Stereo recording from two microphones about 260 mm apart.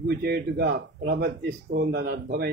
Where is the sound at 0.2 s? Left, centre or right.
Right.